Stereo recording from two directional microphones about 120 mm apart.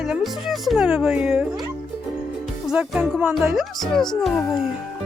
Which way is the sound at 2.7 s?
5° right (ahead or behind).